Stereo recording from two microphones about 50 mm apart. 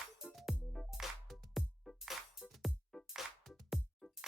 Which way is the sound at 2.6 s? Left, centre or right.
Centre.